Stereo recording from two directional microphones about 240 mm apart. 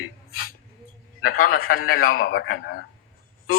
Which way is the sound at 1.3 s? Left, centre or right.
Left.